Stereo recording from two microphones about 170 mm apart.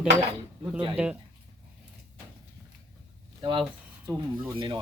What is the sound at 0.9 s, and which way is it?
Speech, 5° right (ahead or behind).